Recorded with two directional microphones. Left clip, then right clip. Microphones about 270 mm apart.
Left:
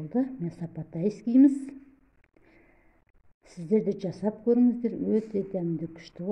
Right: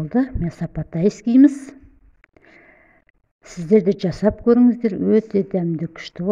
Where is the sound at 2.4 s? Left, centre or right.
Right.